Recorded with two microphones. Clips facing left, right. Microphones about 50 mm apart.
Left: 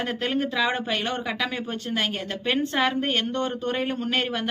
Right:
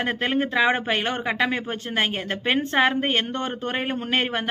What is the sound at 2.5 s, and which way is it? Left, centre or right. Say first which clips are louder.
Speech: right 3 dB; right.